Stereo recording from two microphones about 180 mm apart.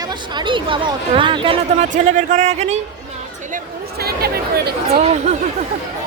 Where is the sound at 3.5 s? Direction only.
60° right (ahead or behind).